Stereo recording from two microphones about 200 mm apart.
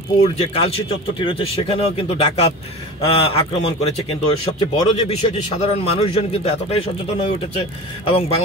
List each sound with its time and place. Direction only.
0.2 s a man's voice: 30° left (ahead or behind)